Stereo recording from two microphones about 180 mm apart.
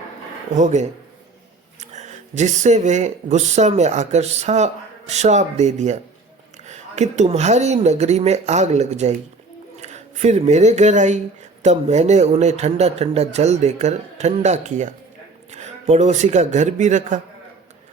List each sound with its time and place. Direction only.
0.5 s speech: 40° right (ahead or behind)